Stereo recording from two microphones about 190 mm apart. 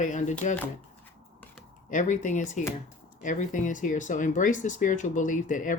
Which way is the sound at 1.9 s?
40° left (ahead or behind).